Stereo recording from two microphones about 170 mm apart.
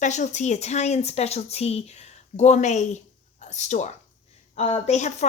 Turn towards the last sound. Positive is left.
turn(degrees=40)  # may be behind; listen again after turning